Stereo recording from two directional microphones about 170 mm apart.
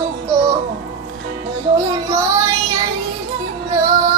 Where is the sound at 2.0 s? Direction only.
20° right (ahead or behind).